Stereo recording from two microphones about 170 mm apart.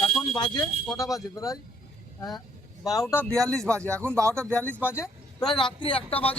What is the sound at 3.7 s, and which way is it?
Speech, 15° right (ahead or behind).